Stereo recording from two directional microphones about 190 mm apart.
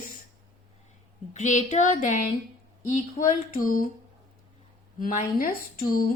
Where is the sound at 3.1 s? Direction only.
45° left (ahead or behind).